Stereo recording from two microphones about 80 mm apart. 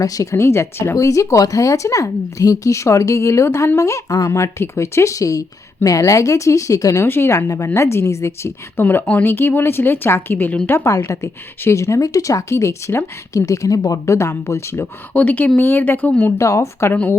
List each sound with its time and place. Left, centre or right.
0.0 s speech: left
0.9 s speech: left
7.1 s a woman's voice: left
14.0 s speech: left
15.1 s a woman's voice: left
16.4 s speech: left
16.9 s a woman's voice: left